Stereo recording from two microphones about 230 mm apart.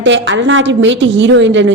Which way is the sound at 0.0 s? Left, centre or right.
Right.